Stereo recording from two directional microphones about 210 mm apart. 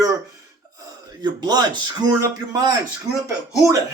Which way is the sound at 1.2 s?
20° right (ahead or behind).